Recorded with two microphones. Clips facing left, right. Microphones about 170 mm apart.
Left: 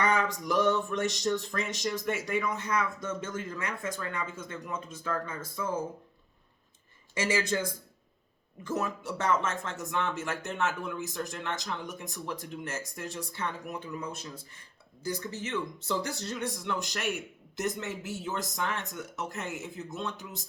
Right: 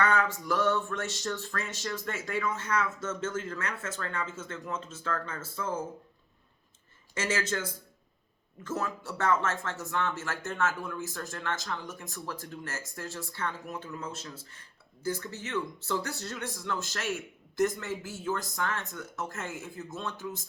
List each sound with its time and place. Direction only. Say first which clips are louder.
0.0 s speech: even; 15° left (ahead or behind)
7.1 s speech: left 2 dB; 15° left (ahead or behind)